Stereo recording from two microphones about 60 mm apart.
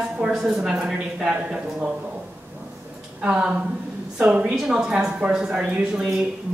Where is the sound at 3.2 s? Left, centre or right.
Centre.